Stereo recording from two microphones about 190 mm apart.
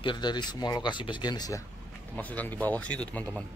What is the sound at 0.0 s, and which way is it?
Speech, 25° left (ahead or behind).